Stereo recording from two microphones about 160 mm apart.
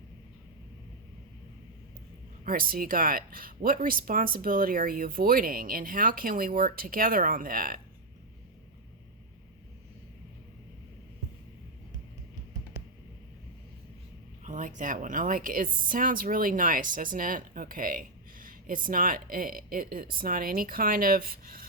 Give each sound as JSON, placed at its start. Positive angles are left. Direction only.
{"t": 2.4, "sound": "a woman's voice", "side_deg": -65}
{"t": 14.4, "sound": "a woman's voice", "side_deg": -50}